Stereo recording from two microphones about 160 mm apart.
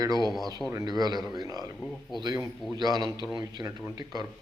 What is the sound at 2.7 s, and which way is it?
A man's voice, 25° right (ahead or behind).